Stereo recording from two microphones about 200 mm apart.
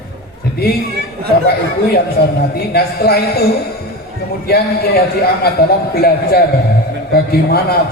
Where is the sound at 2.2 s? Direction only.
55° left (ahead or behind).